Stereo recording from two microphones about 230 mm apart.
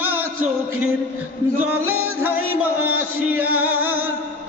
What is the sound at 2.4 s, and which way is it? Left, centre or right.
Speech, right.